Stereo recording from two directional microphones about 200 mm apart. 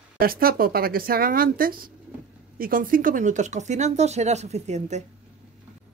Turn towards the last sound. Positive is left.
turn(degrees=-35)  # may be behind; listen again after turning